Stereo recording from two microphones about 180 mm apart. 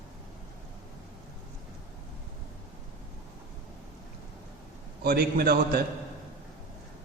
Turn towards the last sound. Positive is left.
turn(degrees=-60)  # may be behind; listen again after turning